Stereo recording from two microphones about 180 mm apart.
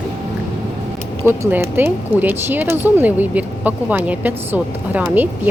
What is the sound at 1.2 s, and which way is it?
Speech, 15° right (ahead or behind).